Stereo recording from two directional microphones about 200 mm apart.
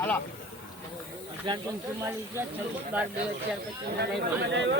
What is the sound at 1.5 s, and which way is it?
Speech, 25° right (ahead or behind).